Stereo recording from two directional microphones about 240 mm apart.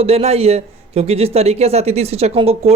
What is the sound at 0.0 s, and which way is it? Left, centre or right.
A man's voice, right.